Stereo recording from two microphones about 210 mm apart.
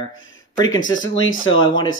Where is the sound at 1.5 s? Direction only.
20° left (ahead or behind).